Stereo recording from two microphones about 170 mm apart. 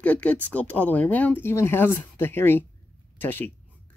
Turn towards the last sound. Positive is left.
turn(degrees=10)  # may be behind; listen again after turning